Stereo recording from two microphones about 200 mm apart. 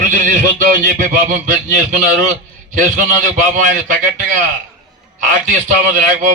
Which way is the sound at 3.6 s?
40° right (ahead or behind).